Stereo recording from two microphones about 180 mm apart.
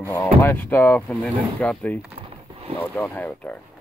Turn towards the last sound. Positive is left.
turn(degrees=10)  # may be behind; listen again after turning